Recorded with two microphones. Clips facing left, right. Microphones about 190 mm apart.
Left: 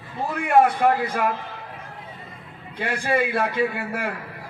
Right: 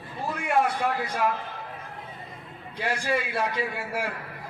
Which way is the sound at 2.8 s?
55° left (ahead or behind).